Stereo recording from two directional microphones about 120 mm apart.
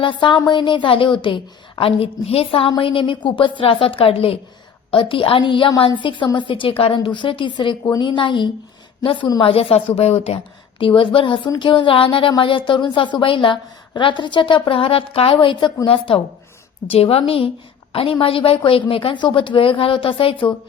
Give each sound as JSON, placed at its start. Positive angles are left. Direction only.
{"t": 0.0, "sound": "a woman's voice", "side_deg": 40}